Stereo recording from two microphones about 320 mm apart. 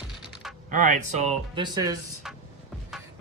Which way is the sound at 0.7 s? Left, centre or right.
Right.